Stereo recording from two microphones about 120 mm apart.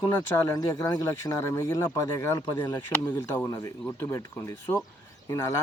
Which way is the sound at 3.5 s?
30° left (ahead or behind).